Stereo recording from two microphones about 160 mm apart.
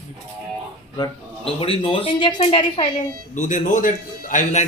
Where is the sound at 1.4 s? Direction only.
35° left (ahead or behind).